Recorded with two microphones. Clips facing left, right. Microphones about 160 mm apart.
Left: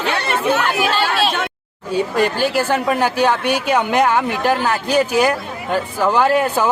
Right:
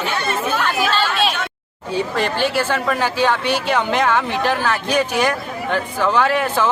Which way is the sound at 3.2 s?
50° left (ahead or behind).